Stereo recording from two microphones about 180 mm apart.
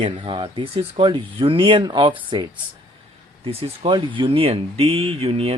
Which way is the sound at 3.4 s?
30° right (ahead or behind).